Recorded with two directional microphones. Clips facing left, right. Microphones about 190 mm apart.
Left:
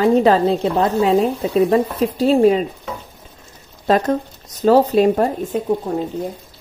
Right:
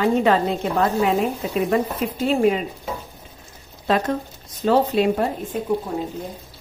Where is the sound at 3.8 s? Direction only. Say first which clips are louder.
Left 5 dB; 40° left (ahead or behind).